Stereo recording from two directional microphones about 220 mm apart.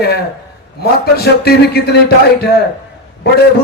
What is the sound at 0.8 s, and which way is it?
A man's voice, 45° left (ahead or behind).